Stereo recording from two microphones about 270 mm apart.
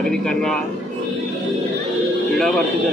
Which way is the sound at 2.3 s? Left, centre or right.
Centre.